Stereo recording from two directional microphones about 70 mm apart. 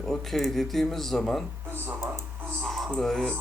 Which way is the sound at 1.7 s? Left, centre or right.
Right.